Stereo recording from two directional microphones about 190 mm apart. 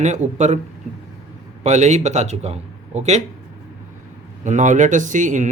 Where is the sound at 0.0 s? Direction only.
40° right (ahead or behind).